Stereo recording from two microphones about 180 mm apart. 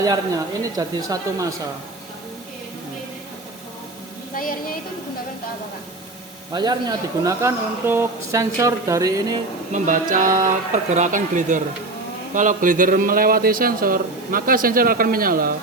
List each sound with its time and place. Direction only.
0.6 s speech: 20° right (ahead or behind)
4.4 s a woman's voice: 50° left (ahead or behind)
6.5 s speech: 25° right (ahead or behind)
9.7 s a man's voice: 45° right (ahead or behind)